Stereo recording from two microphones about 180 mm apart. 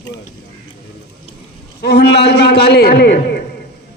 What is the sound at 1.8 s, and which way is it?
A man's voice, 65° left (ahead or behind).